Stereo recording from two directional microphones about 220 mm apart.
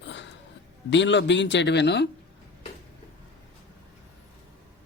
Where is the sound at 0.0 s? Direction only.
55° left (ahead or behind).